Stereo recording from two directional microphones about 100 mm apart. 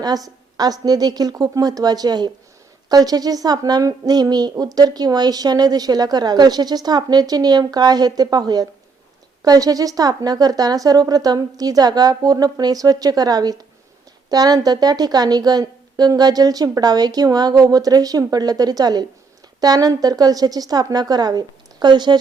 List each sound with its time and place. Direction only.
0.0 s a woman's voice: 40° right (ahead or behind)